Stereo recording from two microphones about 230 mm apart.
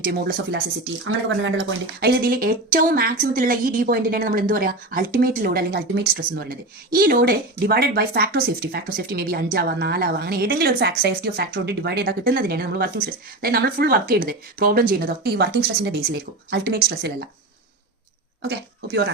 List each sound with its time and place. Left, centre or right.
0.0 s a woman's voice: right
1.0 s a woman's voice: right
18.4 s speech: right